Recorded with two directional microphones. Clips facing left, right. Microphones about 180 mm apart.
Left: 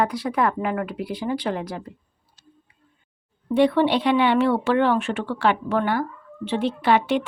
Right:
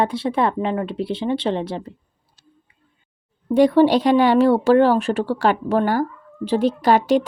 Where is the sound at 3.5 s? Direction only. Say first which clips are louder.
Right 4 dB; 40° right (ahead or behind).